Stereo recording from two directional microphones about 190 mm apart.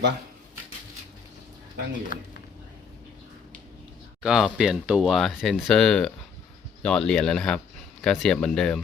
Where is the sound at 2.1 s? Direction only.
45° left (ahead or behind).